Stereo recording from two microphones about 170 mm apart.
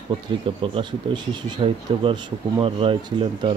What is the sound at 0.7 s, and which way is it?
Speech, 30° right (ahead or behind).